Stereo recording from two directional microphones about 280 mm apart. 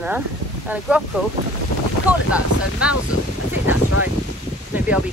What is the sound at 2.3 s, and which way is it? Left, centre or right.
Speech, centre.